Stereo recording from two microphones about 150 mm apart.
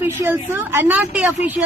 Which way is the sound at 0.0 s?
15° right (ahead or behind).